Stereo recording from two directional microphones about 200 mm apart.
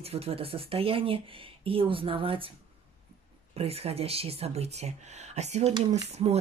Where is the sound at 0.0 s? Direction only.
30° right (ahead or behind).